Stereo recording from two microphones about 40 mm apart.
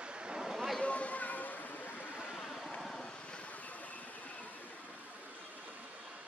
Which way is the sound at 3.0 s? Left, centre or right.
Left.